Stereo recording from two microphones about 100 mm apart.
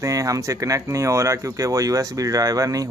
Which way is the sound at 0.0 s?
35° right (ahead or behind).